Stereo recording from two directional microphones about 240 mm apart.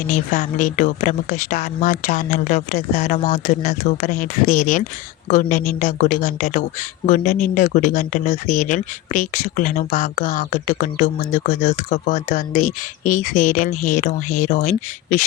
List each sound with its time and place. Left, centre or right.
0.1 s speech: left